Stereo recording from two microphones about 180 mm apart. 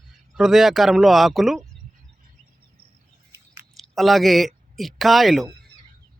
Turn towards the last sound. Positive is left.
turn(degrees=0)  # may be behind; listen again after turning